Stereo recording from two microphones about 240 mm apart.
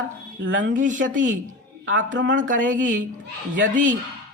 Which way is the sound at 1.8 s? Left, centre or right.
Right.